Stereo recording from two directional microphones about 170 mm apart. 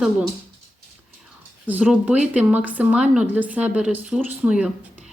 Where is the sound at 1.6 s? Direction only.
5° right (ahead or behind).